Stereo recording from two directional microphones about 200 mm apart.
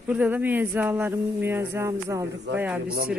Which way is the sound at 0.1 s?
5° right (ahead or behind).